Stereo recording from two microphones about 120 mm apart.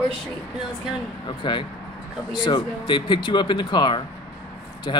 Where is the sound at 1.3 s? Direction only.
40° left (ahead or behind).